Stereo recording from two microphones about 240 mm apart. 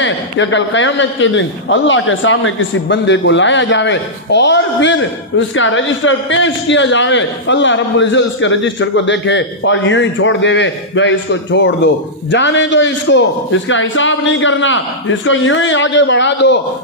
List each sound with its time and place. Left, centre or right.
0.0 s a man's voice: left